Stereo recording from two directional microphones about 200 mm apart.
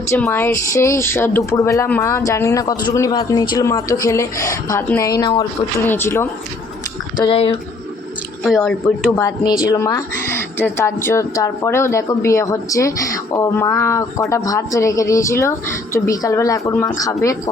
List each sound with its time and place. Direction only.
0.1 s speech: 10° left (ahead or behind)
7.2 s speech: 25° left (ahead or behind)
8.4 s speech: 5° left (ahead or behind)
9.2 s speech: 20° left (ahead or behind)